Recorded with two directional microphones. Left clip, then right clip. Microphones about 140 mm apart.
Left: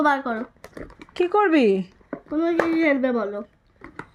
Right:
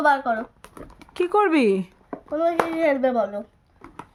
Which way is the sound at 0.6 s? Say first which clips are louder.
Left 3 dB; 25° left (ahead or behind).